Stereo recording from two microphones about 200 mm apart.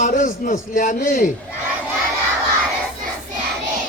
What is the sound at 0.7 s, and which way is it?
Speech, 40° left (ahead or behind).